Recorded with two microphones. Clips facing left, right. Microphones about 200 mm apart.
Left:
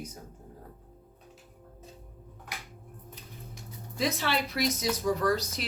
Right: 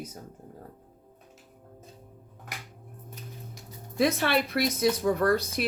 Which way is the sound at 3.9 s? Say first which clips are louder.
Right 5 dB; 60° right (ahead or behind).